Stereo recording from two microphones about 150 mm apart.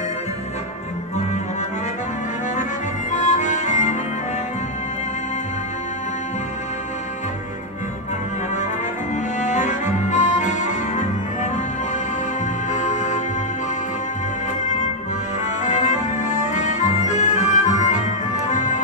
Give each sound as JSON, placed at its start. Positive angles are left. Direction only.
{"t": 3.1, "sound": "music", "side_deg": 55}
{"t": 9.4, "sound": "music", "side_deg": 55}
{"t": 12.7, "sound": "music", "side_deg": 55}
{"t": 15.6, "sound": "music", "side_deg": 55}